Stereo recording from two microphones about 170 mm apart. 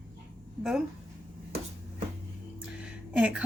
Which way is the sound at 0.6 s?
5° right (ahead or behind).